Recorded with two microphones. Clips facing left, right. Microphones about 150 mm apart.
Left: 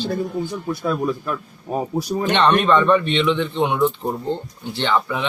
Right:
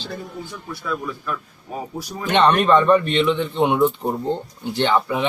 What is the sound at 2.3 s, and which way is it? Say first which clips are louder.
Speech: right 2 dB; centre (ahead or behind).